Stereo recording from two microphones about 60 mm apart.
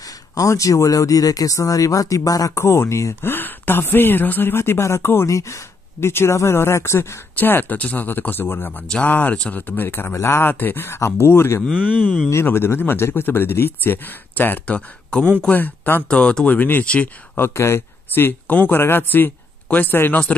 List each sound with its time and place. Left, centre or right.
0.3 s speech: left
2.5 s speech: left
3.2 s speech: left
5.3 s speech: left
7.3 s speech: left
10.1 s speech: left
10.5 s speech: left
16.1 s speech: centre
16.5 s speech: left
16.8 s speech: centre
17.4 s speech: left